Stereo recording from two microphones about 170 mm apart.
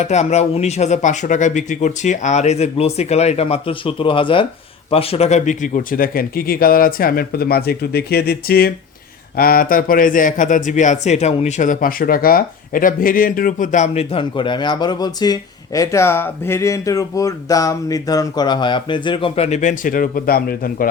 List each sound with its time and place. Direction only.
0.0 s a man's voice: 40° left (ahead or behind); by 20.8 s 60° left (ahead or behind)